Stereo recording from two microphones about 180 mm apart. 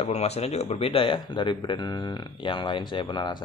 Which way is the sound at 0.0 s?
35° left (ahead or behind).